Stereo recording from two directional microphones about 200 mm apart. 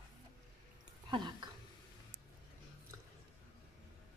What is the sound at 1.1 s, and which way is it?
Speech, 25° right (ahead or behind).